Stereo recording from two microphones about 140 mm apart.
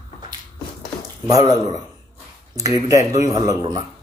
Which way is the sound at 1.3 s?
30° right (ahead or behind).